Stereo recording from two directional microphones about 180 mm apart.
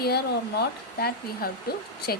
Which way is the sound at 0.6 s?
60° left (ahead or behind).